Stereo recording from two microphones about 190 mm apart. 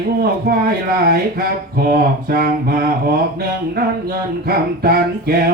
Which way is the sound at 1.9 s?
50° right (ahead or behind).